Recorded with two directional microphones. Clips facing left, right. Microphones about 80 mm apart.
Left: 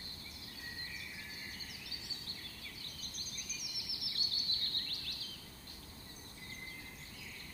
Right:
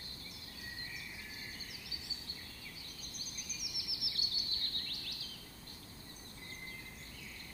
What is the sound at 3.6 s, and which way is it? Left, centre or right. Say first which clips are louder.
Bird vocalization: right 1 dB; centre.